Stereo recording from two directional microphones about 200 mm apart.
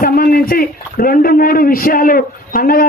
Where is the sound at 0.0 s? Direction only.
45° left (ahead or behind).